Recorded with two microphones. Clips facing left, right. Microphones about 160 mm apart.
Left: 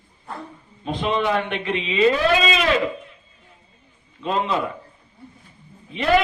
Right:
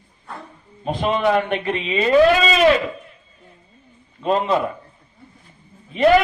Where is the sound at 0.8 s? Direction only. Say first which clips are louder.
Right 3 dB; 45° right (ahead or behind).